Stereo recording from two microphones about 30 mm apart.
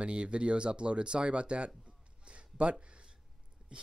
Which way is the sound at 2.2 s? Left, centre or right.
Right.